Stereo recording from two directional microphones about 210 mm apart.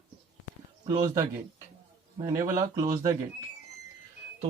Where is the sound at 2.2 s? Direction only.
15° right (ahead or behind).